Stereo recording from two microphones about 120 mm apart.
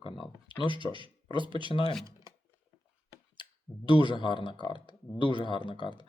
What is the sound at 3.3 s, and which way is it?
Clicking, 40° left (ahead or behind).